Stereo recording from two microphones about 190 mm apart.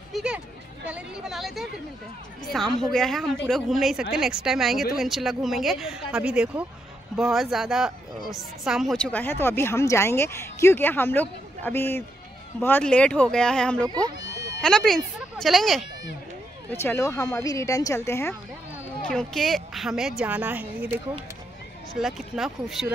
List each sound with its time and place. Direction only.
0.1 s a sound: 5° right (ahead or behind)
0.8 s a woman's voice: 5° right (ahead or behind)
13.8 s speech: 20° right (ahead or behind)
14.6 s a woman's voice: 5° left (ahead or behind)
16.7 s speech: 15° left (ahead or behind)
19.0 s a woman's voice: 5° left (ahead or behind)